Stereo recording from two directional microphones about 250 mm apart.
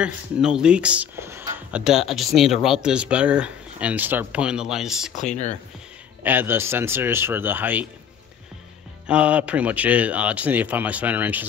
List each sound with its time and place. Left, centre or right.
0.0 s speech: centre
5.1 s speech: left
6.2 s speech: centre
9.0 s speech: centre